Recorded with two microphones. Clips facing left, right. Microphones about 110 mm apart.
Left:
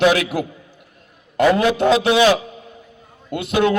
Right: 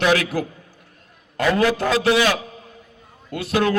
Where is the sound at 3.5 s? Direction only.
25° left (ahead or behind).